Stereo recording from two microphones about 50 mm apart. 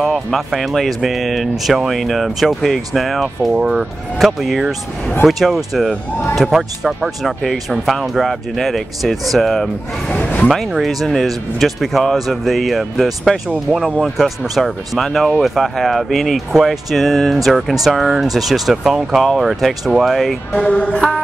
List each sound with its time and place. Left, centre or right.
0.0 s speech: centre
10.1 s speech: left
10.5 s speech: centre
20.5 s music: left